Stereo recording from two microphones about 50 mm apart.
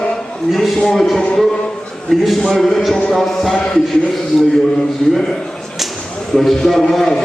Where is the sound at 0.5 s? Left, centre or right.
Centre.